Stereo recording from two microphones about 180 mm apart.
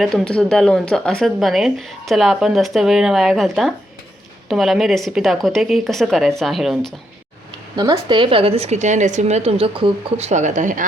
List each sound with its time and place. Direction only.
0.0 s speech: centre (ahead or behind)
7.8 s speech: 25° right (ahead or behind); by 10.8 s 45° right (ahead or behind)